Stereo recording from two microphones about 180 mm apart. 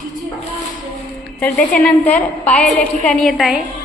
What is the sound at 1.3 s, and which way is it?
A woman's voice, 10° left (ahead or behind).